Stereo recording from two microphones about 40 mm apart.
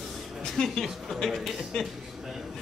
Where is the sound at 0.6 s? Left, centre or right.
Centre.